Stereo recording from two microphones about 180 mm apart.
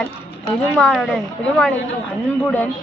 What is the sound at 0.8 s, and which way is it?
Speech, centre (ahead or behind).